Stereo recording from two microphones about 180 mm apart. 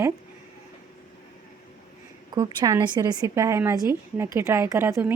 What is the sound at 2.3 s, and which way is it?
A woman's voice, 20° right (ahead or behind).